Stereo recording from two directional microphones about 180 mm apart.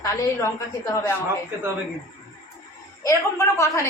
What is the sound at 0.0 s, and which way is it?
Speech, 20° left (ahead or behind).